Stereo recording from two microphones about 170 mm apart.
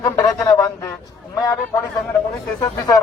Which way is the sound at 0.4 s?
20° left (ahead or behind).